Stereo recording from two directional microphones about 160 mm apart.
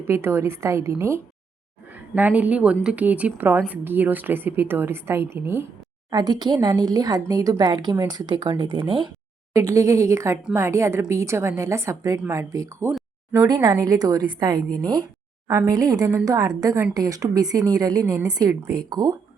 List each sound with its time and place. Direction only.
0.1 s speech: 15° right (ahead or behind)
6.1 s speech: 25° right (ahead or behind)
9.5 s speech: 20° right (ahead or behind)